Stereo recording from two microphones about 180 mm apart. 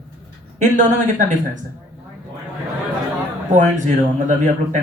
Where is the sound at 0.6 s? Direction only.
45° right (ahead or behind).